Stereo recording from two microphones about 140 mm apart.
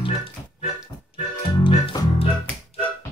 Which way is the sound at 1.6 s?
40° left (ahead or behind).